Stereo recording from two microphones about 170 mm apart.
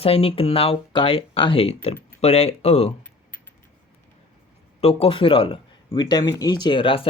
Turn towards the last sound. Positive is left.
turn(degrees=30)  # may be behind; listen again after turning